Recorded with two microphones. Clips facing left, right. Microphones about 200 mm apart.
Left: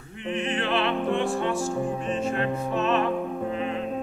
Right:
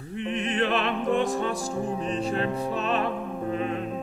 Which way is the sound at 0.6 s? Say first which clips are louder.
Right 1 dB; 40° right (ahead or behind).